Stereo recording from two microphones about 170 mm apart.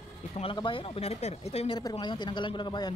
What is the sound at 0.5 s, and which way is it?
Speech, 30° left (ahead or behind).